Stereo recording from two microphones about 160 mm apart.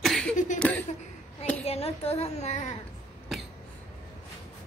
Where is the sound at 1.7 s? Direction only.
40° left (ahead or behind).